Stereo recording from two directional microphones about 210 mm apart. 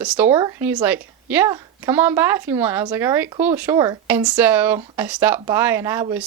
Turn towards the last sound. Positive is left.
turn(degrees=-10)  # may be behind; listen again after turning